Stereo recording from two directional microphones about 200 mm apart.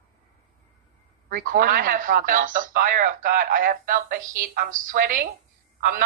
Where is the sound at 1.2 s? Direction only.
45° right (ahead or behind).